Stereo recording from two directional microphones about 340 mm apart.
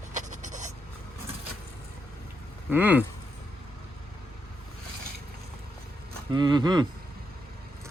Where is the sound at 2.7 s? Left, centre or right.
Centre.